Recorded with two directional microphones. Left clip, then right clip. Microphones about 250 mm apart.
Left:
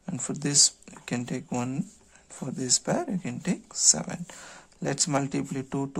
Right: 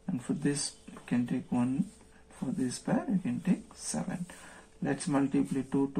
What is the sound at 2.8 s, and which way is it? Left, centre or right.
Speech, left.